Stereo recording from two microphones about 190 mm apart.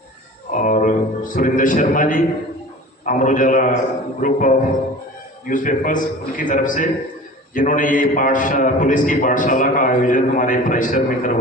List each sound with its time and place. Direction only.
0.5 s a man's voice: 45° left (ahead or behind)